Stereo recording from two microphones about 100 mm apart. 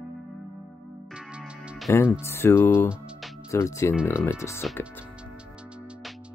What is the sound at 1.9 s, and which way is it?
Speech, 25° left (ahead or behind).